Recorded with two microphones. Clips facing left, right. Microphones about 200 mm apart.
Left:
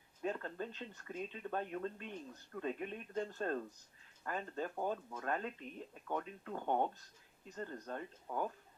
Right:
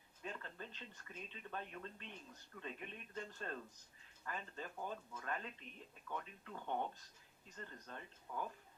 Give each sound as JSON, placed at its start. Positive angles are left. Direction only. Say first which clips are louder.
{"t": 0.2, "sound": "speech", "louder": "left 10 dB", "side_deg": 45}